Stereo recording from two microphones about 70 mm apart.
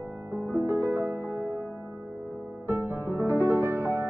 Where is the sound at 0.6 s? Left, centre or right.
Right.